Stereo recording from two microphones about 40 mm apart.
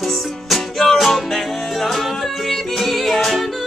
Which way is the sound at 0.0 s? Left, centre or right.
Centre.